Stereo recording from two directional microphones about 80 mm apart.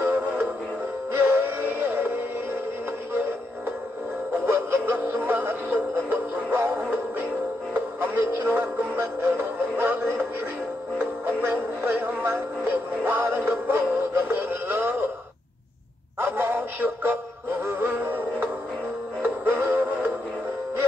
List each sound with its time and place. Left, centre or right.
0.0 s music: right
16.2 s synthetic singing: right
19.2 s music: right